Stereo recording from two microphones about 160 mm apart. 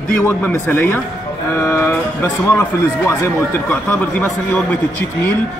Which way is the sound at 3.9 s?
10° left (ahead or behind).